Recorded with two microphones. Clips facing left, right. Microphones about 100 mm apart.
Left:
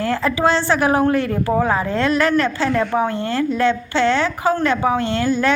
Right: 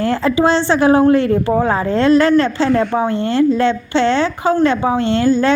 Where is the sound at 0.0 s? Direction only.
30° right (ahead or behind).